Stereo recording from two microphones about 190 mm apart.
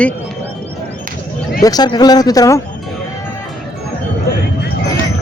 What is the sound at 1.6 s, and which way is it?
Speech, 20° left (ahead or behind).